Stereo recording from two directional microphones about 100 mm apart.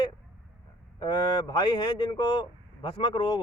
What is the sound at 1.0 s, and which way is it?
Speech, 45° left (ahead or behind).